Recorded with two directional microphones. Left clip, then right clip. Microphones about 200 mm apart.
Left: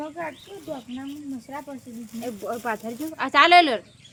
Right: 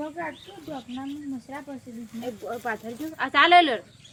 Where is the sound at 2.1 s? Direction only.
30° left (ahead or behind).